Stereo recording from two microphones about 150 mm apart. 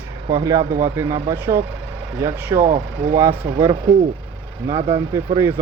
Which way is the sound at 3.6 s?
25° right (ahead or behind).